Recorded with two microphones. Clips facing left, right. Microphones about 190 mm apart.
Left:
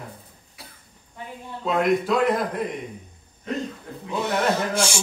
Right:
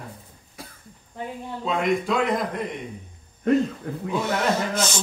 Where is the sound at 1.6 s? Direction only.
Centre (ahead or behind).